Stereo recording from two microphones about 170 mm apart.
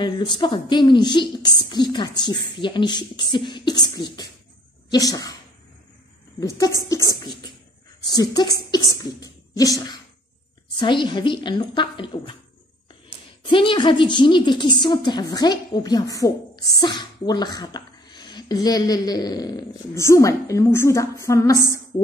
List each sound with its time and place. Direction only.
0.0 s a woman's voice: 30° left (ahead or behind)
6.9 s a woman's voice: 20° left (ahead or behind)
13.5 s a woman's voice: 30° left (ahead or behind)